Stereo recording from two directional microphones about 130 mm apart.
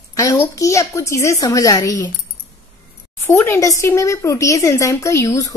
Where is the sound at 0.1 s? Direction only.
25° left (ahead or behind).